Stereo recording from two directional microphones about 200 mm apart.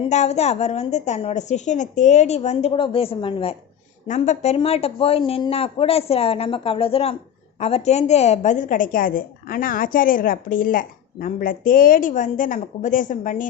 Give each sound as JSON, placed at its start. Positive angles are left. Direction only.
{"t": 0.1, "sound": "a woman's voice", "side_deg": 35}